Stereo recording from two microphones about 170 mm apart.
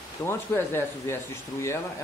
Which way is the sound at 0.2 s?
15° left (ahead or behind).